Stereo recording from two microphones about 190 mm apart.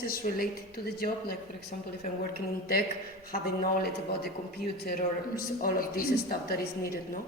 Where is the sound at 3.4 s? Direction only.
55° left (ahead or behind).